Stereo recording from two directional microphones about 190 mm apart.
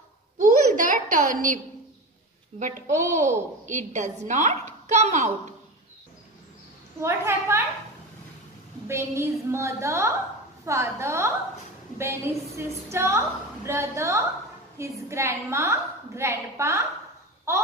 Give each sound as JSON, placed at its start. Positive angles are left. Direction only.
{"t": 0.4, "sound": "a sound", "side_deg": -45}
{"t": 2.6, "sound": "a woman's voice", "side_deg": -40}
{"t": 7.0, "sound": "a woman's voice", "side_deg": -15}
{"t": 8.8, "sound": "a woman's voice", "side_deg": -15}